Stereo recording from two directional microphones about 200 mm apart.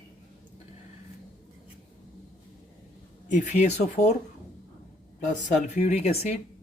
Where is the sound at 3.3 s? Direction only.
35° left (ahead or behind).